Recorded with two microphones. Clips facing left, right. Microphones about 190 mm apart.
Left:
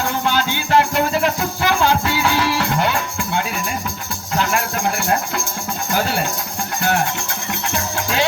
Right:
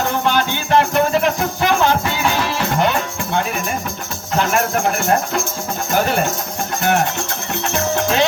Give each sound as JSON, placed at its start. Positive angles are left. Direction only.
{"t": 0.3, "sound": "music", "side_deg": -20}